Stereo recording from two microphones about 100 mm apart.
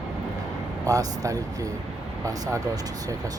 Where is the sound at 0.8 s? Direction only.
35° right (ahead or behind).